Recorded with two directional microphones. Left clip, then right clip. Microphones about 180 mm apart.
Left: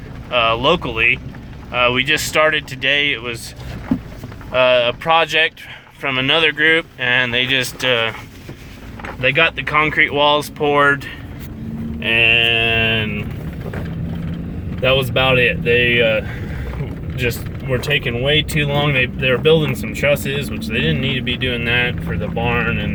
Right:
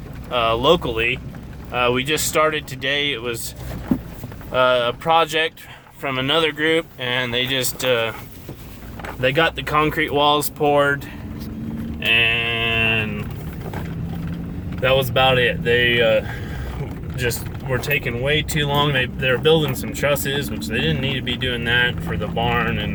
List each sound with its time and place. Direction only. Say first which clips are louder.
0.3 s speech: left 2 dB; 15° right (ahead or behind)
4.5 s speech: left 3 dB; 15° right (ahead or behind)
9.2 s speech: left 3 dB; 30° right (ahead or behind); by 10.8 s 10° right (ahead or behind)
11.9 s sheep: left 4 dB; 10° left (ahead or behind)
14.8 s speech: left 1 dB; centre (ahead or behind)